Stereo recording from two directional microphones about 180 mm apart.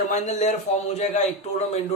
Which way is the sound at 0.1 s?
40° left (ahead or behind).